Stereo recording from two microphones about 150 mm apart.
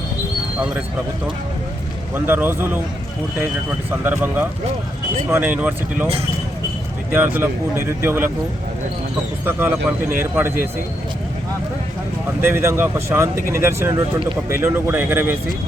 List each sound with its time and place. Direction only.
2.1 s speech: 15° right (ahead or behind)
4.0 s speech: 15° right (ahead or behind)
7.2 s speech: 10° right (ahead or behind)
9.4 s speech: 15° right (ahead or behind)
12.4 s speech: 15° right (ahead or behind)